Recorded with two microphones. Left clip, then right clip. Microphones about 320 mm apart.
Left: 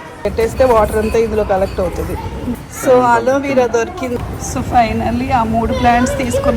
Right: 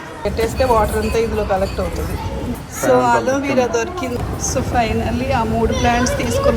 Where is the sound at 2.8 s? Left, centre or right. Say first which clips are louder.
Left 3 dB; centre.